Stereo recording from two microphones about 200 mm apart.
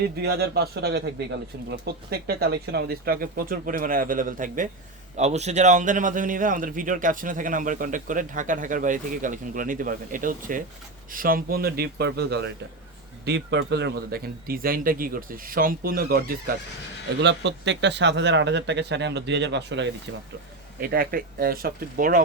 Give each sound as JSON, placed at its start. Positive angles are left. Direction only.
{"t": 0.0, "sound": "speech", "side_deg": -55}
{"t": 17.2, "sound": "speech", "side_deg": -60}
{"t": 20.8, "sound": "speech", "side_deg": -50}